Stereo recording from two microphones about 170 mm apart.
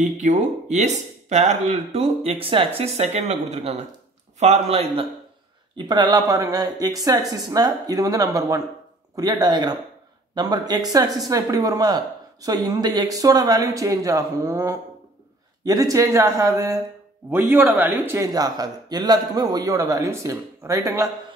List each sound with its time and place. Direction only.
0.0 s a man's voice: 45° right (ahead or behind); by 21.1 s 20° right (ahead or behind)